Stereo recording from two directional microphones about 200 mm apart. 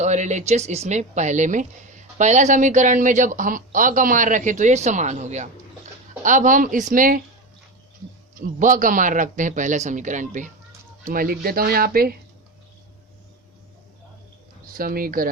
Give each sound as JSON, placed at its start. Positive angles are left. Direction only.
{"t": 0.0, "sound": "speech", "side_deg": -35}
{"t": 8.4, "sound": "speech", "side_deg": -40}
{"t": 14.8, "sound": "speech", "side_deg": -45}